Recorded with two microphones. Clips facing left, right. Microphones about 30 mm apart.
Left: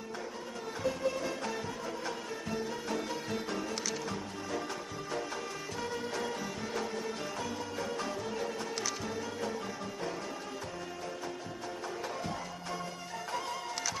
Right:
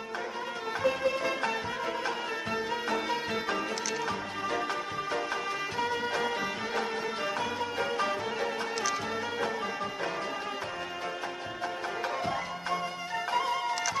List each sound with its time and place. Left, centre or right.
0.8 s music: right
5.8 s music: right
7.3 s music: right
13.3 s music: right